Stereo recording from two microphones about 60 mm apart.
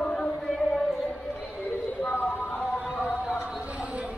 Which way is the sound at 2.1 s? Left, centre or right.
Left.